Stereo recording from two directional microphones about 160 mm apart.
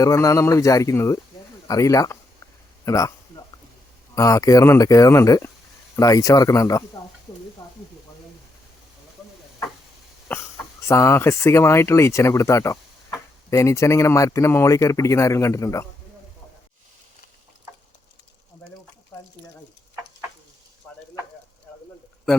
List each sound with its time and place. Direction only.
0.0 s speech: 20° left (ahead or behind)
4.1 s speech: 20° left (ahead or behind)
7.6 s sizzle: 25° left (ahead or behind)
10.3 s speech: 10° left (ahead or behind)